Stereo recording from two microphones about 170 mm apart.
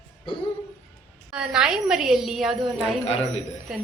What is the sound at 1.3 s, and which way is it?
A woman's voice, 5° right (ahead or behind).